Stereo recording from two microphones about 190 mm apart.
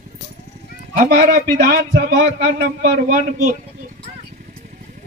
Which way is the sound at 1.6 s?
50° right (ahead or behind).